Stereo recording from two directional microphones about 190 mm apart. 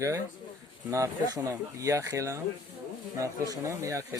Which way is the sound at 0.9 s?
15° right (ahead or behind).